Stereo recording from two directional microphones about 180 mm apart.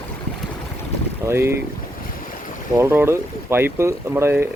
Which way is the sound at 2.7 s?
15° right (ahead or behind).